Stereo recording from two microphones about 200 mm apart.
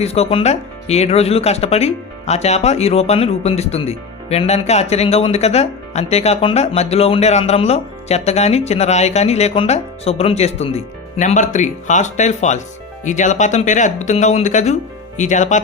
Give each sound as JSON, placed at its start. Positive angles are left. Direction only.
{"t": 0.0, "sound": "speech", "side_deg": 30}